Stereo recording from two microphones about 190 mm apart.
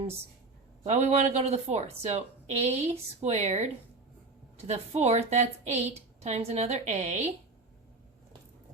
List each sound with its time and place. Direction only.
0.9 s a woman's voice: 35° right (ahead or behind)